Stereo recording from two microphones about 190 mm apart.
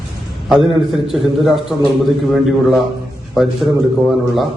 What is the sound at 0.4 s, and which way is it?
A man's voice, centre (ahead or behind).